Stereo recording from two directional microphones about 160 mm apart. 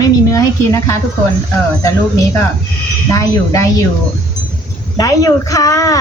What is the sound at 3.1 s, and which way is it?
Speech, 20° left (ahead or behind).